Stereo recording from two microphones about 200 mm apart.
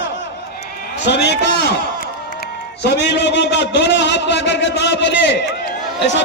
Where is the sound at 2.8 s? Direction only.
60° left (ahead or behind).